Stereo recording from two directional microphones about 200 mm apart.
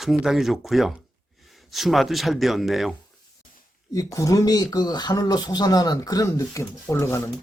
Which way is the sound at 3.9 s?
15° left (ahead or behind).